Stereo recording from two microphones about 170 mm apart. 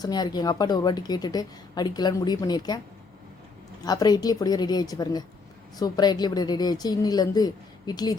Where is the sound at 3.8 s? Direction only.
20° left (ahead or behind).